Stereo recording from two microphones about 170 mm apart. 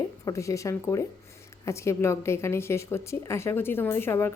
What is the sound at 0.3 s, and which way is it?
A woman's voice, 20° left (ahead or behind).